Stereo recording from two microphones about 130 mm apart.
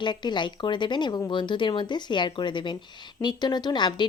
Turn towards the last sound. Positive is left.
turn(degrees=35)  # may be behind; listen again after turning